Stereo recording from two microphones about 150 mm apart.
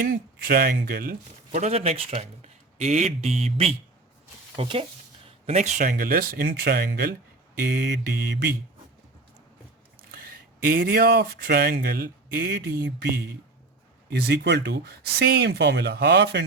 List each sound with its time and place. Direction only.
0.0 s speech: 75° right (ahead or behind)
1.5 s speech: 50° right (ahead or behind)
5.5 s speech: 50° right (ahead or behind)
5.8 s speech: 75° right (ahead or behind); by 8.4 s 90° right
10.2 s speech: 80° right
14.1 s speech: 90° right